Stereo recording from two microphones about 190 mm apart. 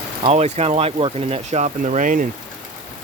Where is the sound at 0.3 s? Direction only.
35° right (ahead or behind).